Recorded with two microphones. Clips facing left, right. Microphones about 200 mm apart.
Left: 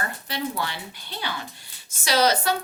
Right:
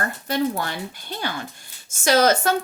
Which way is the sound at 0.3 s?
45° right (ahead or behind).